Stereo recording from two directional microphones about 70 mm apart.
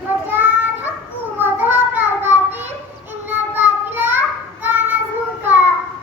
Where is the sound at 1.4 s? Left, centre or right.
Right.